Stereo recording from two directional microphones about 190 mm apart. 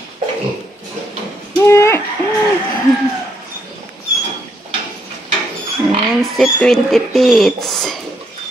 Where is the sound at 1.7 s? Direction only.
15° left (ahead or behind).